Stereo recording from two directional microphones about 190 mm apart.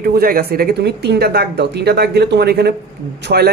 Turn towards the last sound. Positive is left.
turn(degrees=-55)  # may be behind; listen again after turning